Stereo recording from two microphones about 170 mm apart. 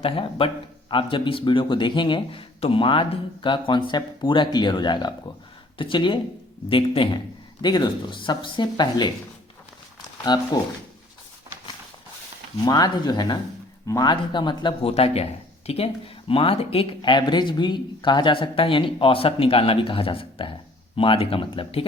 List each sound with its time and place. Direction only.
0.0 s speech: 30° left (ahead or behind)
10.2 s speech: 25° left (ahead or behind)
12.6 s speech: 25° left (ahead or behind)